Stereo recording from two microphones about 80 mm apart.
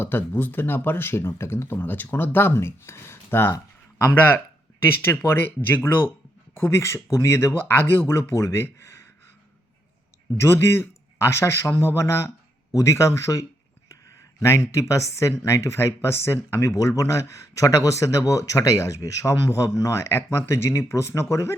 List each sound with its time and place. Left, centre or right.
0.0 s speech: left
5.0 s speech: left
10.3 s speech: left